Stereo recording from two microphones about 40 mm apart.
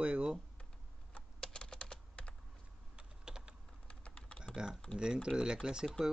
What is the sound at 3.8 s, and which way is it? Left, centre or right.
Typing, left.